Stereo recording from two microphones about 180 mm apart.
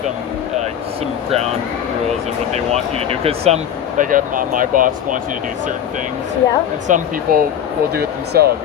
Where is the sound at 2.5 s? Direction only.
35° right (ahead or behind).